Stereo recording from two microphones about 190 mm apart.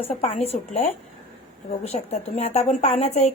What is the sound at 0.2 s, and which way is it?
A woman's voice, 30° left (ahead or behind).